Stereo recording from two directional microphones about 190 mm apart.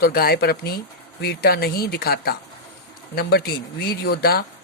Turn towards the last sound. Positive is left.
turn(degrees=55)  # may be behind; listen again after turning